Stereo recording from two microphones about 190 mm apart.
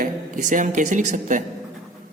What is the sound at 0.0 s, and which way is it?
Speech, 40° right (ahead or behind).